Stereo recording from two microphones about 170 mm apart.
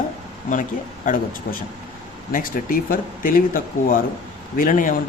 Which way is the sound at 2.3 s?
55° left (ahead or behind).